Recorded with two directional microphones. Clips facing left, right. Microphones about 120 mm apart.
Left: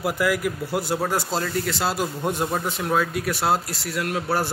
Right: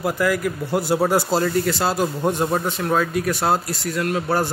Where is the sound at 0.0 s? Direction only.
10° left (ahead or behind).